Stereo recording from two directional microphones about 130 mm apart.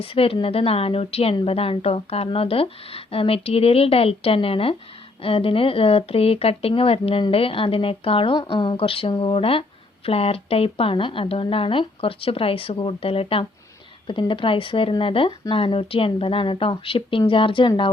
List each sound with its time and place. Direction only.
0.0 s speech: 45° left (ahead or behind)